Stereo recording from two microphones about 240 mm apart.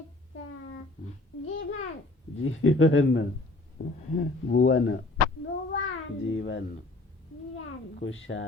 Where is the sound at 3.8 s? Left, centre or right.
Left.